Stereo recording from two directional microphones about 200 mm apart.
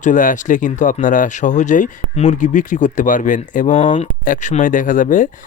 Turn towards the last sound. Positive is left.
turn(degrees=40)  # may be behind; listen again after turning